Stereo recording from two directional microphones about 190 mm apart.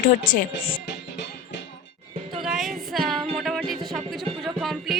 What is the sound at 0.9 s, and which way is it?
Music, 65° left (ahead or behind).